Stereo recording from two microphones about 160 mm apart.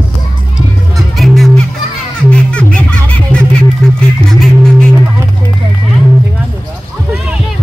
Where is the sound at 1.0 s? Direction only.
Centre (ahead or behind).